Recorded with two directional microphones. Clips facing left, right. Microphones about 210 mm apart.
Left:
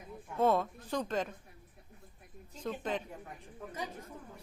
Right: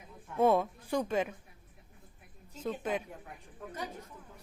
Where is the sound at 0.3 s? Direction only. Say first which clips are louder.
Right 2 dB; 10° right (ahead or behind).